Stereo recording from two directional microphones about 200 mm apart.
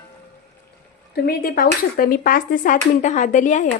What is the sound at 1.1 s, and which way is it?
Speech, 50° left (ahead or behind).